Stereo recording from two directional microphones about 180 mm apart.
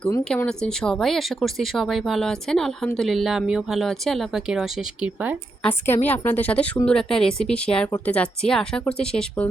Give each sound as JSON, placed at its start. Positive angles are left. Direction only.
{"t": 0.3, "sound": "speech", "side_deg": 5}
{"t": 5.8, "sound": "speech", "side_deg": 10}